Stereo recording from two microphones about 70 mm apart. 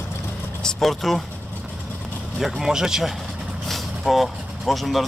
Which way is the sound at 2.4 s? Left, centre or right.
Centre.